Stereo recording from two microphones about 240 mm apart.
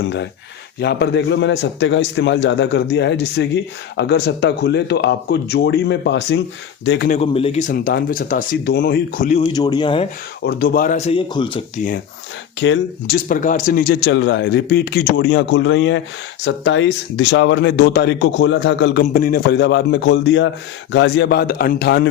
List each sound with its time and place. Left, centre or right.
0.0 s a man's voice: left
7.1 s speech: left
7.9 s speech: left
9.5 s speech: centre
10.4 s speech: left; by 11.6 s centre
12.5 s a man's voice: left
13.2 s a man's voice: left
19.0 s a man's voice: left